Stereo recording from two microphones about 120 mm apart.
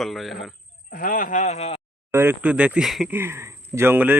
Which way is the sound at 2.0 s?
20° right (ahead or behind).